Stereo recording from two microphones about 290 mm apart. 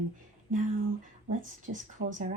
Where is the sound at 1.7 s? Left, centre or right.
Right.